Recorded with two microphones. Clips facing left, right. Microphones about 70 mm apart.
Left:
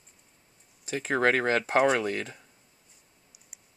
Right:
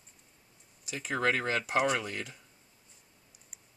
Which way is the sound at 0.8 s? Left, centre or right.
Left.